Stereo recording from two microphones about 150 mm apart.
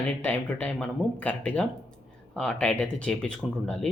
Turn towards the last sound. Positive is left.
turn(degrees=5)  # may be behind; listen again after turning